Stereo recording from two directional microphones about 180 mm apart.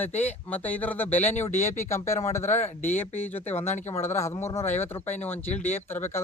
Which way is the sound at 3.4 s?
40° left (ahead or behind).